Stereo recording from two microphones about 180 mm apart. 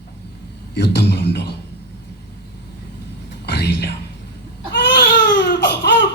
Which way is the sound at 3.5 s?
65° left (ahead or behind).